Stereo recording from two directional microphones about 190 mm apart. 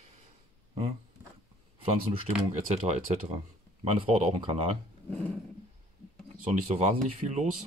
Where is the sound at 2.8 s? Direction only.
35° right (ahead or behind).